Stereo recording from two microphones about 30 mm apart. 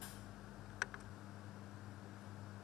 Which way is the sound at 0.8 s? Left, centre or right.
Centre.